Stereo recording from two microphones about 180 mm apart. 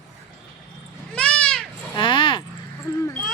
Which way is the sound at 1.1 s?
5° left (ahead or behind).